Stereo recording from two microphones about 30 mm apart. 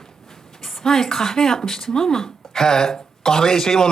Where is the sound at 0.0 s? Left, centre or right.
Centre.